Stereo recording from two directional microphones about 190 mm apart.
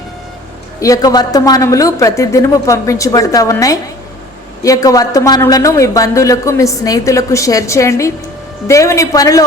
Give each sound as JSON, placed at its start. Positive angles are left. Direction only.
{"t": 0.8, "sound": "speech", "side_deg": 20}